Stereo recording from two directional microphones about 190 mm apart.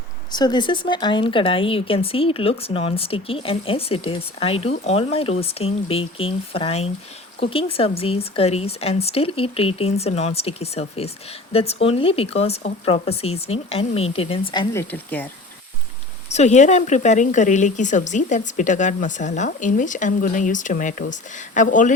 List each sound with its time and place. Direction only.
0.3 s speech: 20° left (ahead or behind)
16.3 s speech: 35° left (ahead or behind)